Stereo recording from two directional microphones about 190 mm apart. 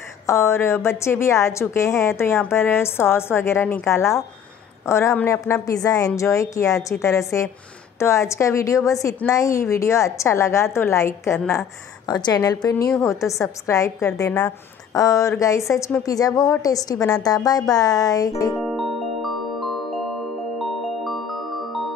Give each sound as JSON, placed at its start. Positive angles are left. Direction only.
{"t": 0.3, "sound": "a woman's voice", "side_deg": 15}
{"t": 18.6, "sound": "music", "side_deg": 0}
{"t": 20.5, "sound": "glockenspiel", "side_deg": 0}